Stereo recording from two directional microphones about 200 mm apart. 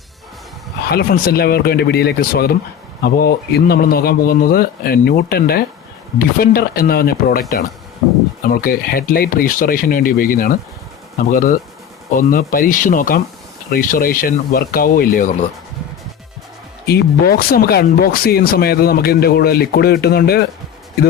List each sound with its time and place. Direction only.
0.9 s speech: 50° left (ahead or behind)
8.4 s speech: 45° left (ahead or behind)
16.8 s speech: 50° left (ahead or behind)